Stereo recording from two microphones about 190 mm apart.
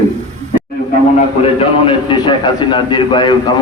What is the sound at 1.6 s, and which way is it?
A man's voice, 25° left (ahead or behind).